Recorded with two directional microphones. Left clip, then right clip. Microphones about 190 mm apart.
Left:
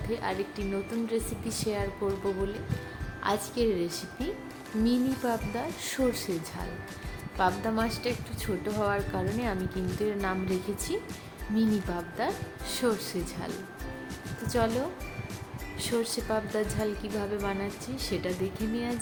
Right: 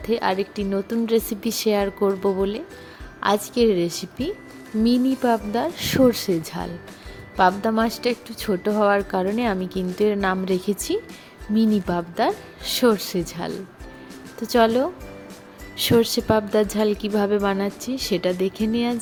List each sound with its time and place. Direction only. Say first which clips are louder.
0.1 s a woman's voice: right 10 dB; 45° right (ahead or behind)
7.3 s a woman's voice: right 9 dB; 40° right (ahead or behind)
14.5 s a woman's voice: right 11 dB; 45° right (ahead or behind)